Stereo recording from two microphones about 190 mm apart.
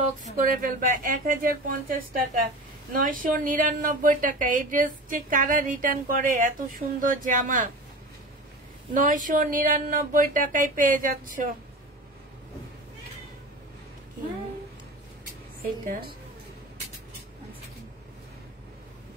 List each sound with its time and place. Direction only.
0.4 s a woman's voice: 45° right (ahead or behind)
8.9 s a woman's voice: 45° right (ahead or behind)